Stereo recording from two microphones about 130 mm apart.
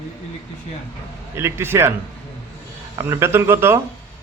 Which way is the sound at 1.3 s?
20° right (ahead or behind).